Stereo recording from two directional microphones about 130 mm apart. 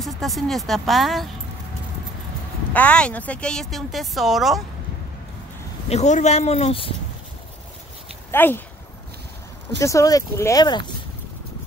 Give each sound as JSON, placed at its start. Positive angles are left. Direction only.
{"t": 0.0, "sound": "speech", "side_deg": 0}
{"t": 2.7, "sound": "speech", "side_deg": 10}
{"t": 5.9, "sound": "speech", "side_deg": 60}
{"t": 8.3, "sound": "speech", "side_deg": 15}
{"t": 9.8, "sound": "speech", "side_deg": 25}